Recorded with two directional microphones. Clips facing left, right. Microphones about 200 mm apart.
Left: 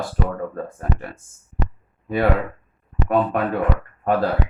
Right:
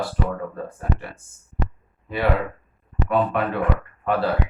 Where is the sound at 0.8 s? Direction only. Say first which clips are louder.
Even; 45° left (ahead or behind).